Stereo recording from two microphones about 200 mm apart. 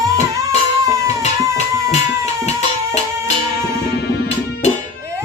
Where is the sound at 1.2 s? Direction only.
35° left (ahead or behind).